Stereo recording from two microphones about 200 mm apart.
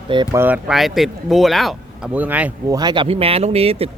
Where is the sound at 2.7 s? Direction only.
20° right (ahead or behind).